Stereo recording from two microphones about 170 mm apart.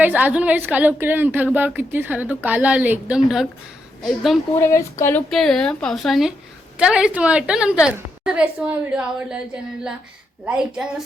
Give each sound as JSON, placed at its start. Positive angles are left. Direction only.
{"t": 0.0, "sound": "a woman's voice", "side_deg": -10}
{"t": 4.6, "sound": "speech", "side_deg": 15}
{"t": 5.3, "sound": "a woman's voice", "side_deg": 0}
{"t": 10.4, "sound": "a woman's voice", "side_deg": -5}